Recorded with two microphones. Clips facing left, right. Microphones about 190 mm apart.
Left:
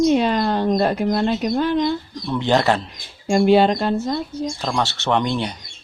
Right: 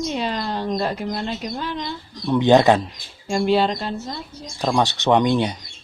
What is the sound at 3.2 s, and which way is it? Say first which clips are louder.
Speech: left 5 dB; 55° left (ahead or behind).